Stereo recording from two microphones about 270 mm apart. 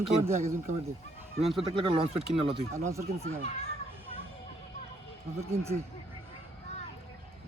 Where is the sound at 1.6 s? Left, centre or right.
Centre.